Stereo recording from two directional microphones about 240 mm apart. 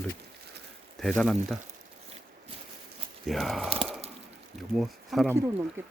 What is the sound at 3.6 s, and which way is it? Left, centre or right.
Speech, right.